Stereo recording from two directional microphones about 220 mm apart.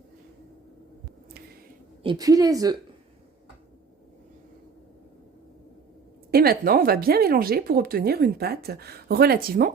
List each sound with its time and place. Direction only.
2.0 s a woman's voice: 15° right (ahead or behind)
6.3 s speech: 45° right (ahead or behind)